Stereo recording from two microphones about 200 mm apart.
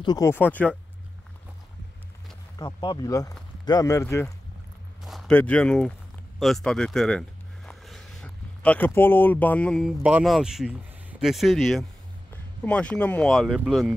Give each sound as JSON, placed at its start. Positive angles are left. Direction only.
{"t": 0.0, "sound": "speech", "side_deg": 15}
{"t": 2.6, "sound": "speech", "side_deg": 25}